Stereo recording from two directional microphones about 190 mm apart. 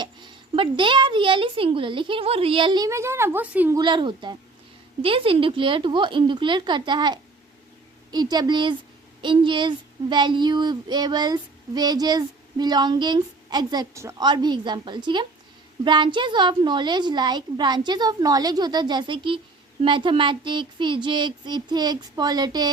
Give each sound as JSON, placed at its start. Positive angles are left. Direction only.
{"t": 0.0, "sound": "a child's voice", "side_deg": -25}
{"t": 3.8, "sound": "a child's voice", "side_deg": -25}